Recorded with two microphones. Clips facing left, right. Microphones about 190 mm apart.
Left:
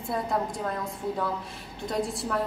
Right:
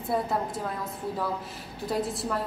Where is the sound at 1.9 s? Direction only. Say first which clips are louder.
Even; centre (ahead or behind).